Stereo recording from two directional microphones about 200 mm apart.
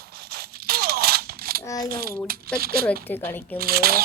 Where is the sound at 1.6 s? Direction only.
20° left (ahead or behind).